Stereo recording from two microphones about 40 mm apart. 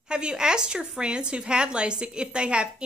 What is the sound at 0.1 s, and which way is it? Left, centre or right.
A woman's voice, centre.